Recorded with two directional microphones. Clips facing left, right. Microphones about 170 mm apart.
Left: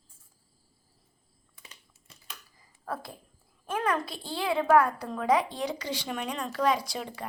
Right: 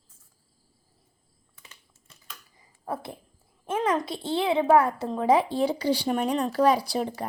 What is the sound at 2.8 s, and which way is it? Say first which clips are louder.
A woman's voice: right 3 dB; 20° right (ahead or behind).